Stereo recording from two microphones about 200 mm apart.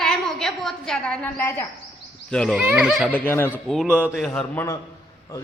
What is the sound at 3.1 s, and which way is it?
A man's voice, 10° left (ahead or behind).